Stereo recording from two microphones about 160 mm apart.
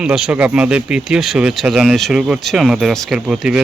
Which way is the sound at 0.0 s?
5° right (ahead or behind).